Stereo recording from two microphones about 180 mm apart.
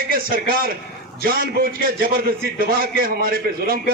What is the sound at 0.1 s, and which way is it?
A man's voice, 55° right (ahead or behind).